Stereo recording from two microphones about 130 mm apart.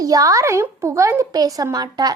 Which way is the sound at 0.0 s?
25° right (ahead or behind).